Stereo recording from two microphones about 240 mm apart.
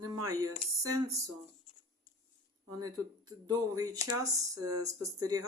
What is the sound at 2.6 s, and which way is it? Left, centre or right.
Speech, centre.